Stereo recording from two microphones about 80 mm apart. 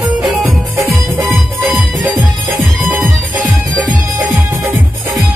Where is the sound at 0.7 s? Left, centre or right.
Right.